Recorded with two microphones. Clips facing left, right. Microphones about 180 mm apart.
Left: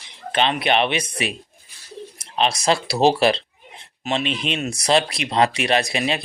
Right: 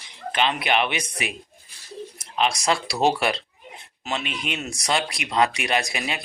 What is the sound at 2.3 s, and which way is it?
Speech, 25° left (ahead or behind).